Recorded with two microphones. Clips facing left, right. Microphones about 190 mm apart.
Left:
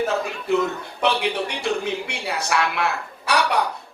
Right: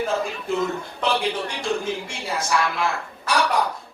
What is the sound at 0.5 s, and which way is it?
A man's voice, 65° left (ahead or behind).